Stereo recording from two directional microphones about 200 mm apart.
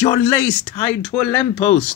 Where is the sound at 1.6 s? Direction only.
35° left (ahead or behind).